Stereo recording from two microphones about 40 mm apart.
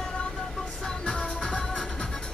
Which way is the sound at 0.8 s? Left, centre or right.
Left.